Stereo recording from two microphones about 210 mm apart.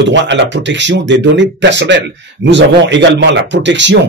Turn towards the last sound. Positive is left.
turn(degrees=-60)  # may be behind; listen again after turning